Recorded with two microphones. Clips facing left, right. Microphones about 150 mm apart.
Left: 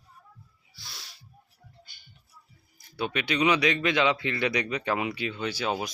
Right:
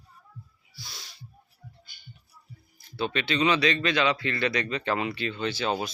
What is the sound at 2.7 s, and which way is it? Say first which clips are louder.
Speech: right 1 dB; 15° left (ahead or behind).